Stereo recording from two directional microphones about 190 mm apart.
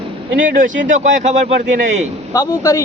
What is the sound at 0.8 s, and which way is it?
Speech, 40° right (ahead or behind).